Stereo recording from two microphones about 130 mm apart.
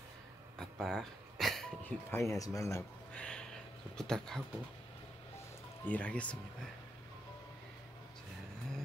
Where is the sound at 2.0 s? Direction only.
20° left (ahead or behind).